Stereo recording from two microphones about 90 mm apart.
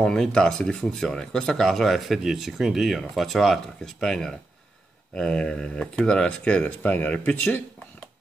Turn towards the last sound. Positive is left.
turn(degrees=15)  # may be behind; listen again after turning